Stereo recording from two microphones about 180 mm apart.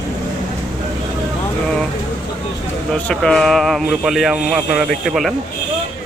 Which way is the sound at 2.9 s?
5° left (ahead or behind).